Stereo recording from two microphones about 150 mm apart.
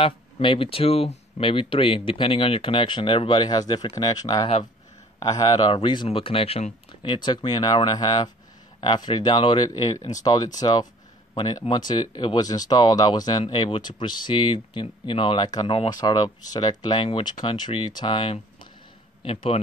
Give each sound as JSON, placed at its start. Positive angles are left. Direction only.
{"t": 0.0, "sound": "speech", "side_deg": 35}